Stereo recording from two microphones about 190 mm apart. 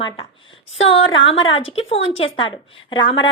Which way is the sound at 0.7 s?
85° left.